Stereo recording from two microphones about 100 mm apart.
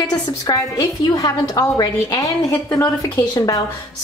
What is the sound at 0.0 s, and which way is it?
A woman's voice, 40° left (ahead or behind).